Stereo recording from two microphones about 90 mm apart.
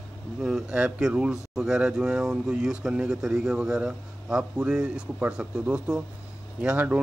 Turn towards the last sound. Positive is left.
turn(degrees=-15)  # may be behind; listen again after turning